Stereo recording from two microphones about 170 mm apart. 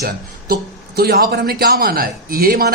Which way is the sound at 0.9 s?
70° right (ahead or behind).